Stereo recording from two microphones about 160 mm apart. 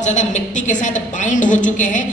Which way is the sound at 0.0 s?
50° left (ahead or behind).